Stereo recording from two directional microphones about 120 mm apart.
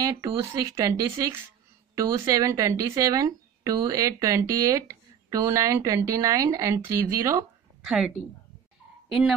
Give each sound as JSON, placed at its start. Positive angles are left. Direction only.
{"t": 0.0, "sound": "speech", "side_deg": -25}
{"t": 7.8, "sound": "a woman's voice", "side_deg": -5}